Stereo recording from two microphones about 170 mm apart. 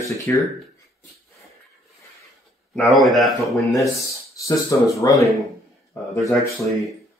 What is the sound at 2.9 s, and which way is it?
Speech, centre (ahead or behind).